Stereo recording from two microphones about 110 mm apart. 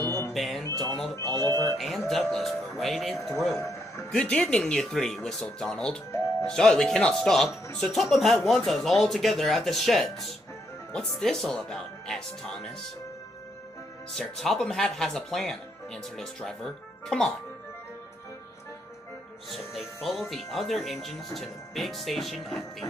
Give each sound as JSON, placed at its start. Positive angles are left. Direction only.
{"t": 0.0, "sound": "music", "side_deg": 25}
{"t": 0.3, "sound": "speech", "side_deg": 0}
{"t": 1.5, "sound": "mantra", "side_deg": -40}
{"t": 1.8, "sound": "speech", "side_deg": 0}
{"t": 14.1, "sound": "speech", "side_deg": 5}
{"t": 19.5, "sound": "speech", "side_deg": 0}